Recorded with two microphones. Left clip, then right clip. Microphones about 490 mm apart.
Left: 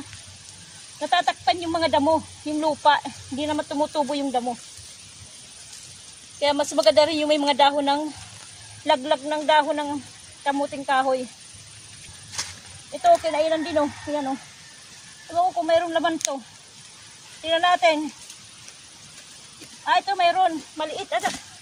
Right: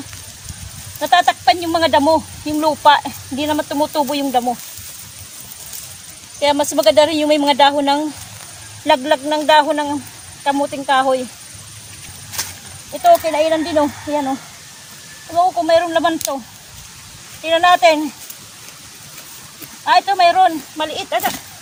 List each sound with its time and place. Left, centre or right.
1.0 s speech: left
6.4 s speech: left
12.3 s a sound: left
13.0 s speech: left
15.4 s speech: left
17.4 s speech: left
19.8 s speech: left